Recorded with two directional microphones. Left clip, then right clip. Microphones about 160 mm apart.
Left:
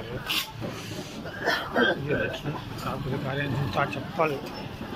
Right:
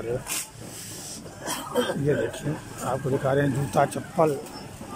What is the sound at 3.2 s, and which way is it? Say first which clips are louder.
Speech: right 7 dB; 45° right (ahead or behind).